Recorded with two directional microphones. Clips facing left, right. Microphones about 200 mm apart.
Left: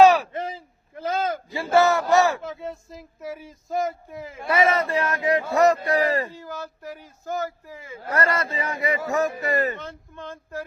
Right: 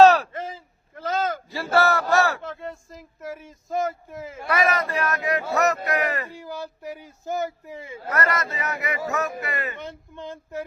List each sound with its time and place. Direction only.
0.0 s a sound: 10° left (ahead or behind)
2.4 s speech: 5° left (ahead or behind)
4.4 s a man's voice: 25° left (ahead or behind)
6.3 s speech: 15° right (ahead or behind)
8.1 s a man's voice: 30° left (ahead or behind)
9.7 s speech: 15° right (ahead or behind)